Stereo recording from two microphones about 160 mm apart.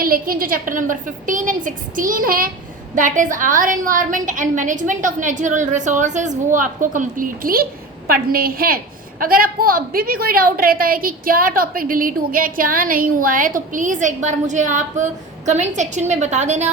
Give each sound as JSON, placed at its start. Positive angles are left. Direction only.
{"t": 0.0, "sound": "a woman's voice", "side_deg": -65}